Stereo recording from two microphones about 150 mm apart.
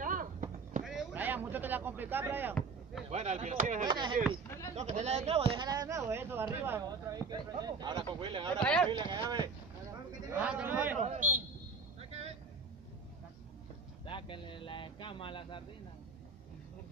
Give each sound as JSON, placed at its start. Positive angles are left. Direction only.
{"t": 0.0, "sound": "run", "side_deg": -65}
{"t": 0.8, "sound": "a sound", "side_deg": -5}
{"t": 3.1, "sound": "speech", "side_deg": -50}
{"t": 3.9, "sound": "speech", "side_deg": -30}
{"t": 4.5, "sound": "a sound", "side_deg": 20}
{"t": 4.7, "sound": "speech", "side_deg": -50}
{"t": 5.7, "sound": "speech", "side_deg": -25}
{"t": 10.3, "sound": "a man's voice", "side_deg": -10}
{"t": 11.1, "sound": "a man's voice", "side_deg": -60}
{"t": 12.0, "sound": "vehicle", "side_deg": -45}
{"t": 14.0, "sound": "speech", "side_deg": 35}